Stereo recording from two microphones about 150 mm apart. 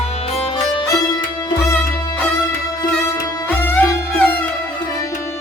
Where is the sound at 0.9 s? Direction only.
25° left (ahead or behind).